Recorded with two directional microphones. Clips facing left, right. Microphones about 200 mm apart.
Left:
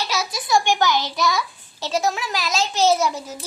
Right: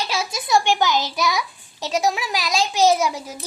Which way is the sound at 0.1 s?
25° right (ahead or behind).